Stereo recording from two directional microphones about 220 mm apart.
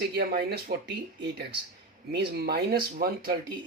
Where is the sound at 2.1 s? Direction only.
45° right (ahead or behind).